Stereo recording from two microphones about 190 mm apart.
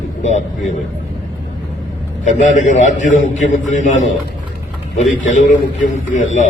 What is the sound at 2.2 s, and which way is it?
A man's voice, 40° left (ahead or behind).